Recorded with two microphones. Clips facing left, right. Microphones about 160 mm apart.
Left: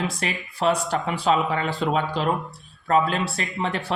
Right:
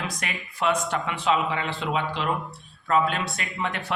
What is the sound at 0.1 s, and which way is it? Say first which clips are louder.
A man's voice: left 5 dB; 30° left (ahead or behind).